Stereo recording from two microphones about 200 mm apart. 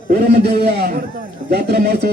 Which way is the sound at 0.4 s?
50° right (ahead or behind).